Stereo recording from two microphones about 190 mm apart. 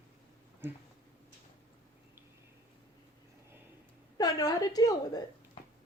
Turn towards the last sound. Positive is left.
turn(degrees=20)  # may be behind; listen again after turning